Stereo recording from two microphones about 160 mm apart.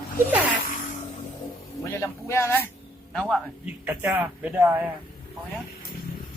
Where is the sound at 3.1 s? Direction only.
5° left (ahead or behind).